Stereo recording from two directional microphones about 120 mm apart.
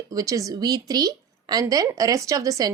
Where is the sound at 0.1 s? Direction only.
30° right (ahead or behind).